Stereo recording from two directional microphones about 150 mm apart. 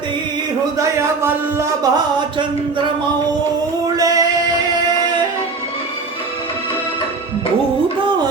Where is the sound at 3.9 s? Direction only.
25° right (ahead or behind).